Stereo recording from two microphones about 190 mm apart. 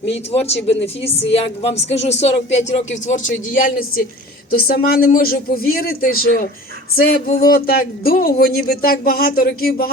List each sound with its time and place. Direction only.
0.1 s a woman's voice: 35° left (ahead or behind); by 9.9 s 50° left (ahead or behind)